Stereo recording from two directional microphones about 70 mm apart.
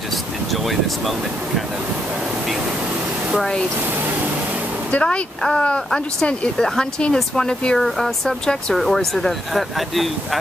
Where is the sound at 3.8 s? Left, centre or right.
Right.